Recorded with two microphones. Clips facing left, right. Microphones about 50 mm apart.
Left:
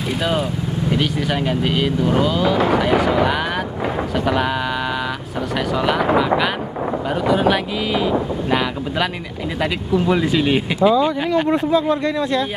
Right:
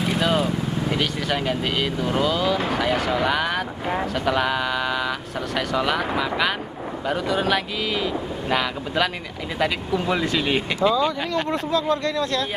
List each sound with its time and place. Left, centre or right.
0.2 s speech: centre
5.7 s speech: centre